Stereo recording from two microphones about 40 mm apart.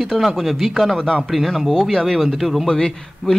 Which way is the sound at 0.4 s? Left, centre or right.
Centre.